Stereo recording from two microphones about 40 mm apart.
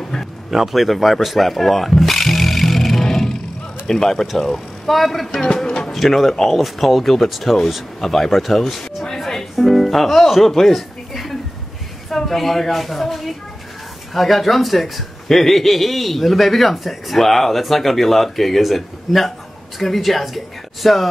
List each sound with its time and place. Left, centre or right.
0.5 s wild animals: centre
3.8 s speech: centre
5.4 s speech: centre
5.9 s speech: centre
9.0 s music: centre
12.1 s speech: centre